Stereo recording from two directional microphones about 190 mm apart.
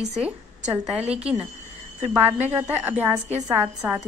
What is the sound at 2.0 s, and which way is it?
A woman's voice, 10° right (ahead or behind).